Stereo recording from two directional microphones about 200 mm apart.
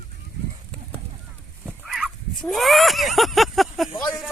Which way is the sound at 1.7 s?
Centre (ahead or behind).